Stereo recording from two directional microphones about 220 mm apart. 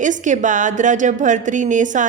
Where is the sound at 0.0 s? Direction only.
35° right (ahead or behind).